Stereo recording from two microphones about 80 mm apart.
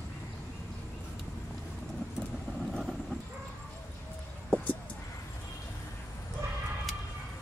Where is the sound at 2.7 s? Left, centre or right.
Centre.